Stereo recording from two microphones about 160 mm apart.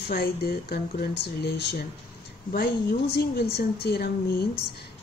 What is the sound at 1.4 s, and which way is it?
Speech, 90° left.